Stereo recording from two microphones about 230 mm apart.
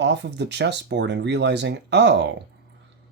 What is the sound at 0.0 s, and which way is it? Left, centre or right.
Speech, right.